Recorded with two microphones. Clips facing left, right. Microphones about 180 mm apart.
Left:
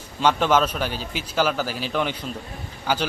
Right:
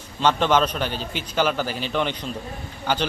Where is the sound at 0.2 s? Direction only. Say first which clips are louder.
Even; 10° left (ahead or behind).